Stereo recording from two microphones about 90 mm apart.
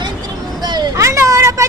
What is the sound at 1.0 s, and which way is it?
Speech, 35° right (ahead or behind).